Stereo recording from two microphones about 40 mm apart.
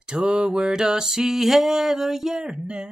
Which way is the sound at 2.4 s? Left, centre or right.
Centre.